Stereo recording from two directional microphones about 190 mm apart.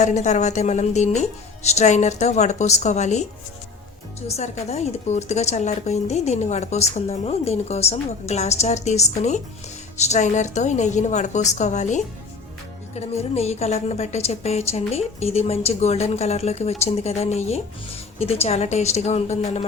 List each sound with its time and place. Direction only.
0.0 s a woman's voice: 40° left (ahead or behind)
4.3 s a woman's voice: 35° left (ahead or behind)